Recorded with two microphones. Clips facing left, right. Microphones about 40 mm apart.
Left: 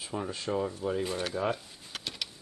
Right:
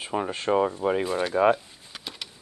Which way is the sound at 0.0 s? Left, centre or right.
Right.